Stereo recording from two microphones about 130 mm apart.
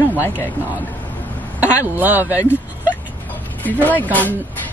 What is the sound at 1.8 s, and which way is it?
Speech, 15° right (ahead or behind).